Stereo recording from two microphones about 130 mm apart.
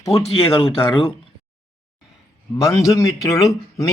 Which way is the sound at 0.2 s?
50° left (ahead or behind).